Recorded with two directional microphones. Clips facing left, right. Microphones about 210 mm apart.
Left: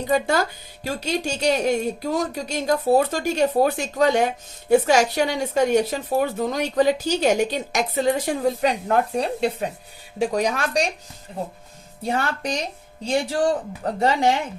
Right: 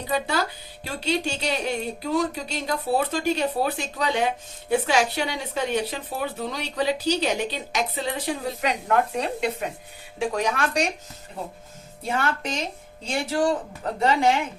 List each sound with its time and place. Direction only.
0.1 s a woman's voice: 50° left (ahead or behind)
8.6 s speech: 35° left (ahead or behind)
12.0 s speech: 35° left (ahead or behind)
14.0 s speech: 35° left (ahead or behind)